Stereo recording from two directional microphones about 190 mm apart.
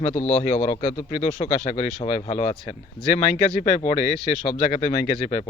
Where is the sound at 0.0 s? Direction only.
30° left (ahead or behind).